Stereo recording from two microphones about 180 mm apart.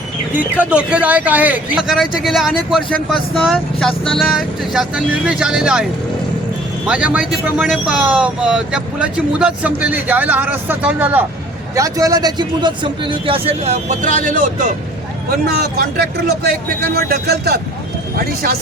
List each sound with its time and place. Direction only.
0.3 s speech: 10° right (ahead or behind)
11.7 s a man's voice: 20° right (ahead or behind); by 14.7 s 45° right (ahead or behind)
15.3 s speech: 60° right (ahead or behind)
18.4 s speech: 50° right (ahead or behind)